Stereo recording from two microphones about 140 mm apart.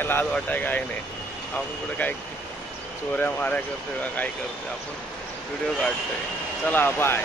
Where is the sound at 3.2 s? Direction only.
15° left (ahead or behind).